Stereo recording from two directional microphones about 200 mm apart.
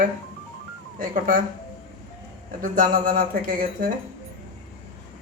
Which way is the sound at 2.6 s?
45° right (ahead or behind).